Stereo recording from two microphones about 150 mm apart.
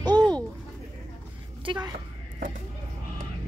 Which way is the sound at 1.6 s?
30° right (ahead or behind).